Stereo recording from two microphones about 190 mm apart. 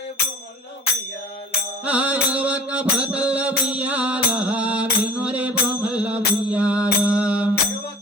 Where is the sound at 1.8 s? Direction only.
5° right (ahead or behind).